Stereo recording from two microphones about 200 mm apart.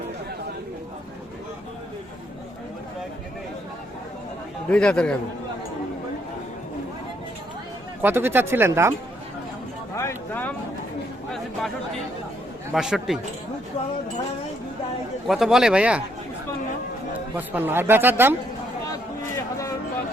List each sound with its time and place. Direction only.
4.7 s speech: 5° left (ahead or behind)
8.0 s a man's voice: 10° right (ahead or behind)
9.9 s a sound: 15° left (ahead or behind)
12.7 s speech: centre (ahead or behind)
15.3 s speech: centre (ahead or behind)
17.3 s a man's voice: 10° right (ahead or behind)